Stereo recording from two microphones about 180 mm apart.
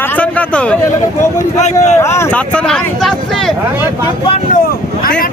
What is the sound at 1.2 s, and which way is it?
Speech, 40° left (ahead or behind).